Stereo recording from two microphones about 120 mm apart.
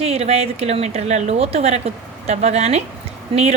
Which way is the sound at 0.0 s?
60° right (ahead or behind).